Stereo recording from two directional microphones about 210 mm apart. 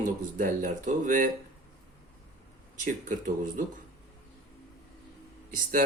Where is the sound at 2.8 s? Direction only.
35° right (ahead or behind).